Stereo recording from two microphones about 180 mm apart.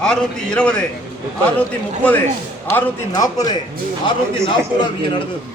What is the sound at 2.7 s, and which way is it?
Speech, 20° left (ahead or behind).